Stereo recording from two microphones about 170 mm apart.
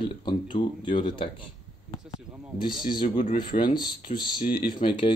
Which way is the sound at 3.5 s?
35° left (ahead or behind).